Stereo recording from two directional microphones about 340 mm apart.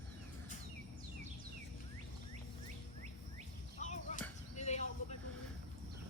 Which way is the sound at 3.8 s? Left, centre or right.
Left.